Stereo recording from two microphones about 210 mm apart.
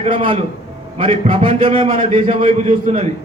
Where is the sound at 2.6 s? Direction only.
40° right (ahead or behind).